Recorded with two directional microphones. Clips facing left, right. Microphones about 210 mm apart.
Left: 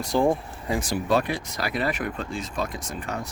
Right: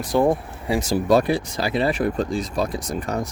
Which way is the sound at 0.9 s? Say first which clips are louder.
Right 7 dB; 40° right (ahead or behind).